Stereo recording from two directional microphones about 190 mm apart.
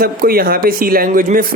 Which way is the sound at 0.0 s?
50° right (ahead or behind).